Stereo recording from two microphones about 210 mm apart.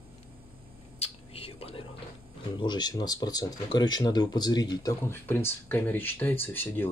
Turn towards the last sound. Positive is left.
turn(degrees=10)  # may be behind; listen again after turning